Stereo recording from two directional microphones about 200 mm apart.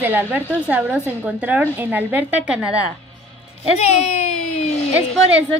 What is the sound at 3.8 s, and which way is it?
Speech, 30° left (ahead or behind).